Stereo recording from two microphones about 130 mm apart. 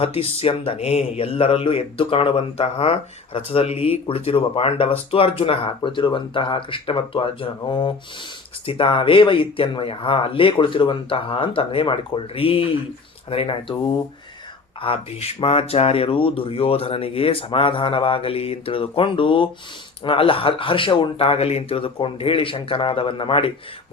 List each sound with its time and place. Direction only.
0.0 s speech: 45° left (ahead or behind)